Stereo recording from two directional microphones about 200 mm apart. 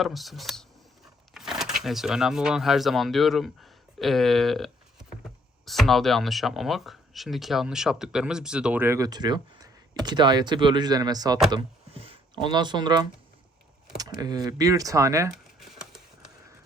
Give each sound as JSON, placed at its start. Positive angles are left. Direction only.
{"t": 0.0, "sound": "speech", "side_deg": 0}
{"t": 15.3, "sound": "crumpling", "side_deg": 0}